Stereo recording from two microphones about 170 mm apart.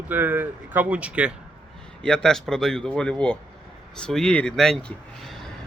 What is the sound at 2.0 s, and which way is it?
Speech, 5° left (ahead or behind).